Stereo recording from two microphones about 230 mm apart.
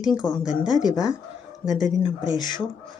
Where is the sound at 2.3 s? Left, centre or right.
Centre.